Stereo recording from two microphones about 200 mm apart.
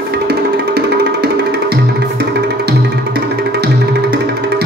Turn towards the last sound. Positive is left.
turn(degrees=-55)  # may be behind; listen again after turning